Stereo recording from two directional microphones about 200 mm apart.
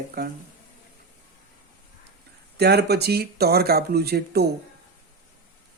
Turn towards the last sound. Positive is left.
turn(degrees=-55)  # may be behind; listen again after turning